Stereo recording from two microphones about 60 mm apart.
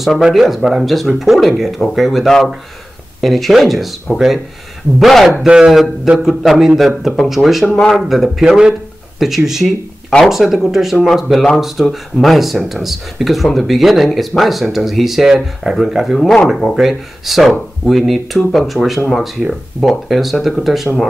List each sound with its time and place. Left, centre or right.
0.0 s speech: centre
5.0 s speech: centre